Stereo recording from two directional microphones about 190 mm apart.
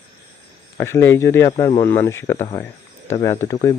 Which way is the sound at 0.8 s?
15° left (ahead or behind).